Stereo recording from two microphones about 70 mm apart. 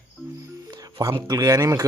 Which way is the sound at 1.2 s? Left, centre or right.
Right.